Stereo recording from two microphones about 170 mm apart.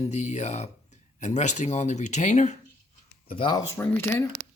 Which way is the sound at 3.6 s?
15° left (ahead or behind).